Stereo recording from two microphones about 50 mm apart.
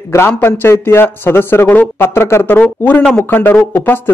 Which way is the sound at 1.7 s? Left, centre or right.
Left.